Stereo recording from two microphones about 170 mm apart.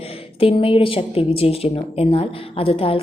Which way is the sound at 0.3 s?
35° left (ahead or behind).